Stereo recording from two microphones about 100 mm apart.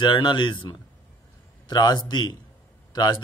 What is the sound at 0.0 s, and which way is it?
A man's voice, 50° left (ahead or behind).